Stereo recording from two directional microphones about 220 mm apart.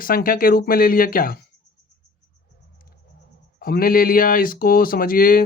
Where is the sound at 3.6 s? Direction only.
40° left (ahead or behind).